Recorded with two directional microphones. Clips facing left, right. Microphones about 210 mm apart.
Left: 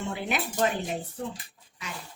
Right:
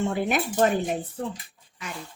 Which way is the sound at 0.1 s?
45° right (ahead or behind).